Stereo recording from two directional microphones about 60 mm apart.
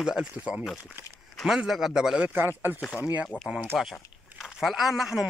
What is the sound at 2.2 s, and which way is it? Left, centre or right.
Speech, right.